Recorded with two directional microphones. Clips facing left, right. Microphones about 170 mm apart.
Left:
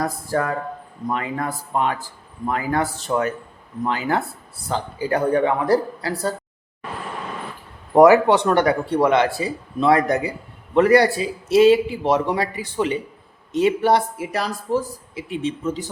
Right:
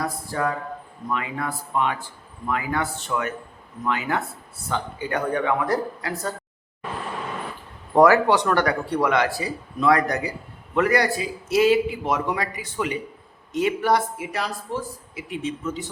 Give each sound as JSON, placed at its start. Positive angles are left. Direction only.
{"t": 0.0, "sound": "a man's voice", "side_deg": 45}
{"t": 7.9, "sound": "speech", "side_deg": 20}
{"t": 15.1, "sound": "speech", "side_deg": 30}